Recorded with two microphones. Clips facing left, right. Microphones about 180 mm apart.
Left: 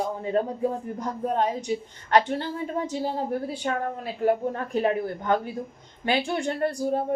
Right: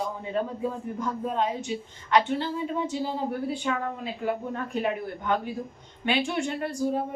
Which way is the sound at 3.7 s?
50° left (ahead or behind).